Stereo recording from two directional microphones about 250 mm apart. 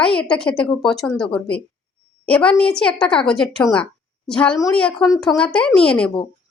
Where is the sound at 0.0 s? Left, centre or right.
Centre.